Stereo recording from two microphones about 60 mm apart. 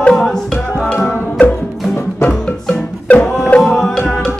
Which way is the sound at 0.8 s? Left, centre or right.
Centre.